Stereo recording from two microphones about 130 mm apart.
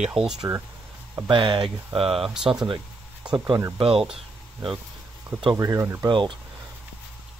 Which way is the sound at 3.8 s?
45° right (ahead or behind).